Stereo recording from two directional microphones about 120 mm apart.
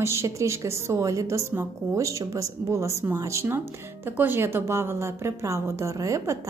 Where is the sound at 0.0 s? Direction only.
25° right (ahead or behind).